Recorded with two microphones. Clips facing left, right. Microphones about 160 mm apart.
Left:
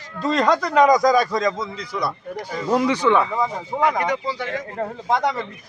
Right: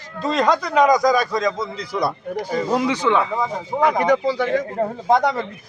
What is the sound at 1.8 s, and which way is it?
Speech, 35° right (ahead or behind).